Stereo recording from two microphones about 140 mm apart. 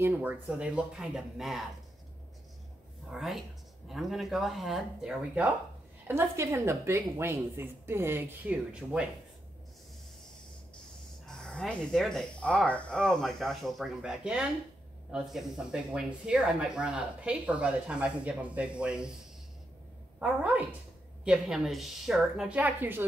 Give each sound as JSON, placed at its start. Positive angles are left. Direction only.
{"t": 0.0, "sound": "speech", "side_deg": -15}
{"t": 3.1, "sound": "speech", "side_deg": 0}
{"t": 11.2, "sound": "speech", "side_deg": 5}
{"t": 20.2, "sound": "speech", "side_deg": -10}